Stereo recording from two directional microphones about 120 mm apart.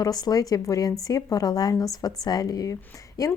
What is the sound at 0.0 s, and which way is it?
A woman's voice, 30° left (ahead or behind).